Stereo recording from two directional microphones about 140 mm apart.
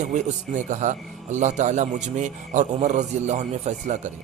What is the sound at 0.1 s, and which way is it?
Speech, 60° right (ahead or behind).